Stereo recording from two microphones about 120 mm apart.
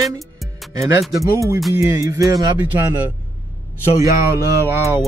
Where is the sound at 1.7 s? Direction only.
25° right (ahead or behind).